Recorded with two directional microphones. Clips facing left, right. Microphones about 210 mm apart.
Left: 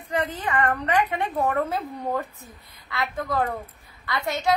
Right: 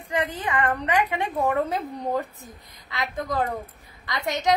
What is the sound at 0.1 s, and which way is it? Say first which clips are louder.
A woman's voice: even; 15° right (ahead or behind).